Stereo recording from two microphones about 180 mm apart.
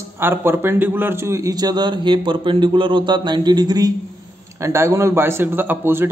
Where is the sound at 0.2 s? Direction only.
10° right (ahead or behind).